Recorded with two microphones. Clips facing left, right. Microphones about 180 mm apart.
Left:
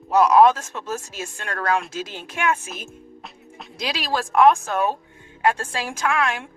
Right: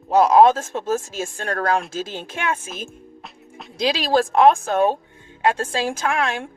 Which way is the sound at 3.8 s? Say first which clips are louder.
Right 7 dB; 30° right (ahead or behind).